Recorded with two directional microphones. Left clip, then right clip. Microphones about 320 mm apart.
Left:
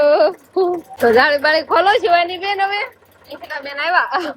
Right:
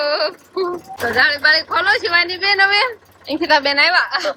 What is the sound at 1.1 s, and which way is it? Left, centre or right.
A woman's voice, centre.